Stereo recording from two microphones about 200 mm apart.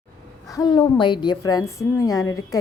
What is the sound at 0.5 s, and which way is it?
A woman's voice, 20° left (ahead or behind).